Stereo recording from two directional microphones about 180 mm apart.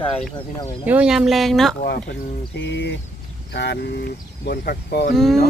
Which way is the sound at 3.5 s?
75° left (ahead or behind).